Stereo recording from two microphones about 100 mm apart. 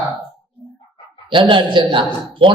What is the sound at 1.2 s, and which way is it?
A man's voice, 55° right (ahead or behind).